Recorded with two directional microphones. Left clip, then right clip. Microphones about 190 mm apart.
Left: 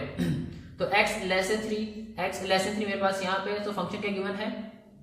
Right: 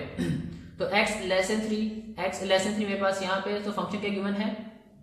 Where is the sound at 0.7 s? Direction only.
25° right (ahead or behind).